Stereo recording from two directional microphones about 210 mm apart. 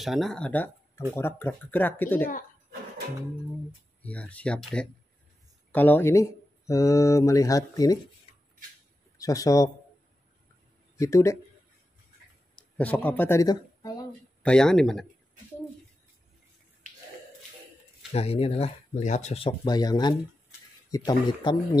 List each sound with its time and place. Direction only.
0.0 s speech: centre (ahead or behind)
4.0 s speech: 5° left (ahead or behind)
9.2 s speech: 15° left (ahead or behind)
11.0 s speech: 15° left (ahead or behind)
12.5 s speech: 5° left (ahead or behind)
14.4 s speech: 5° left (ahead or behind)
18.1 s speech: 30° left (ahead or behind)